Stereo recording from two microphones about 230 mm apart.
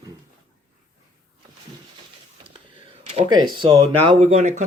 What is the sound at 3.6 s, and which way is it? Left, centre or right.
Speech, right.